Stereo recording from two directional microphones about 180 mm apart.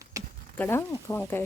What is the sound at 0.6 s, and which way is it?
Speech, 15° left (ahead or behind).